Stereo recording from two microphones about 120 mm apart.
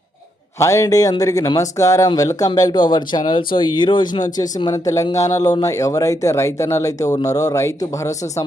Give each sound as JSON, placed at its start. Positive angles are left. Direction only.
{"t": 0.6, "sound": "speech", "side_deg": 25}